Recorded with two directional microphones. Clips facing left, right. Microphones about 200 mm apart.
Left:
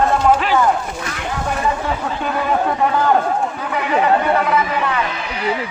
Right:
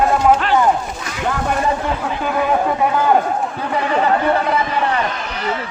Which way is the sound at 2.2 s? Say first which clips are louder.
Right 2 dB; 5° right (ahead or behind).